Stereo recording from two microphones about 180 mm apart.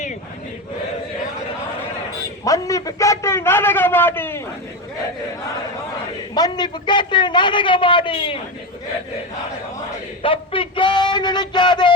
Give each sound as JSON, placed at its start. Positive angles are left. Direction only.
{"t": 2.4, "sound": "a man's voice", "side_deg": 20}
{"t": 6.3, "sound": "a man's voice", "side_deg": 25}
{"t": 10.2, "sound": "a man's voice", "side_deg": 30}